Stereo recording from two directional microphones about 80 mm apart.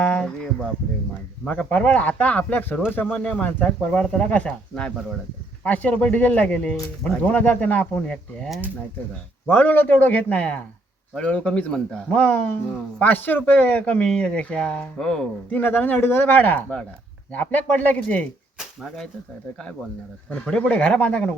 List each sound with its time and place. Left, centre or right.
0.0 s a sound: centre
1.5 s speech: centre
9.5 s speech: left; by 15.3 s centre
15.4 s speech: left
20.3 s speech: centre